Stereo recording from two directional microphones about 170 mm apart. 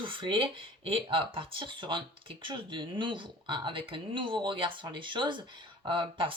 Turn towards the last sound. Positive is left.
turn(degrees=-30)  # may be behind; listen again after turning